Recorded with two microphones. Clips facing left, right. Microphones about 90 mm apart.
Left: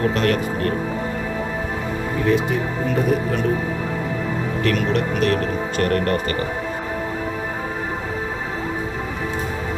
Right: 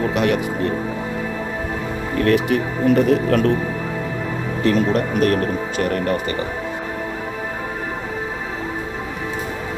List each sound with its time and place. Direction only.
0.0 s speech: 10° right (ahead or behind)
2.2 s speech: 70° right (ahead or behind)
4.6 s speech: 35° right (ahead or behind)
5.7 s speech: 5° right (ahead or behind)